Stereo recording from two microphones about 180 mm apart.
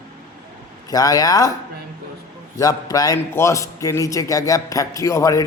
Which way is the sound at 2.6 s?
20° left (ahead or behind).